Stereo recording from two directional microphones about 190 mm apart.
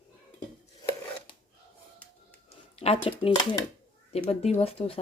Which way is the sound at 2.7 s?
30° left (ahead or behind).